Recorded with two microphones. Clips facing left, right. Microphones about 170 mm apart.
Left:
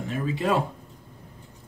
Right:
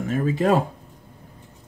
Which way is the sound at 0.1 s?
45° right (ahead or behind).